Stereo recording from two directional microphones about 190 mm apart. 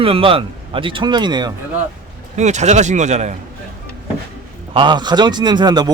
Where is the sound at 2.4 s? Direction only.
35° right (ahead or behind).